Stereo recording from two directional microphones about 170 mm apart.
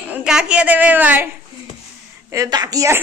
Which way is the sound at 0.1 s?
5° right (ahead or behind).